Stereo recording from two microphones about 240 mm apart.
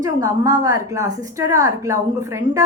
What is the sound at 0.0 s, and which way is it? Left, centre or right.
A woman's voice, centre.